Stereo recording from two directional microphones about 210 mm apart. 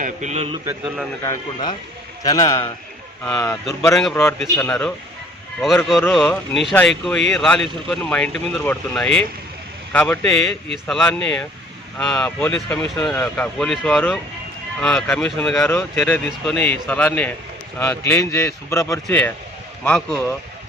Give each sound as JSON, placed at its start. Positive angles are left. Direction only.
{"t": 0.0, "sound": "a man's voice", "side_deg": -35}
{"t": 0.6, "sound": "a man's voice", "side_deg": -10}
{"t": 1.2, "sound": "speech", "side_deg": 15}